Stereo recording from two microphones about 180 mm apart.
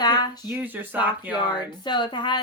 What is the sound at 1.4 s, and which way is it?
Speech, 25° left (ahead or behind).